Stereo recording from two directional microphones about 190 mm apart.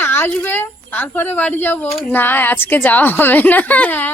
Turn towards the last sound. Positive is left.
turn(degrees=10)  # may be behind; listen again after turning